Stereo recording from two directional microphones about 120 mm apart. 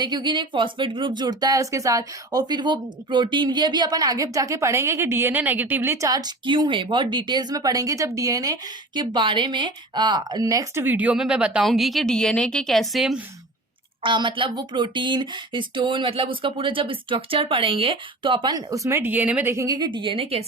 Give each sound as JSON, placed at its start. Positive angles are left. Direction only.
{"t": 0.0, "sound": "speech", "side_deg": -35}
{"t": 9.0, "sound": "speech", "side_deg": -40}
{"t": 10.8, "sound": "a woman's voice", "side_deg": -15}
{"t": 14.0, "sound": "speech", "side_deg": -45}
{"t": 18.5, "sound": "speech", "side_deg": -25}
{"t": 19.5, "sound": "speech", "side_deg": -30}